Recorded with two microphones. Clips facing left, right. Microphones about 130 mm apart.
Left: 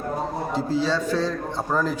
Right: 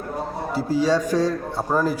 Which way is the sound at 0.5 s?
10° right (ahead or behind).